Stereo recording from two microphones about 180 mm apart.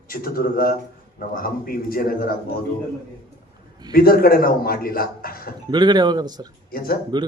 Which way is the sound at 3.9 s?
55° left (ahead or behind).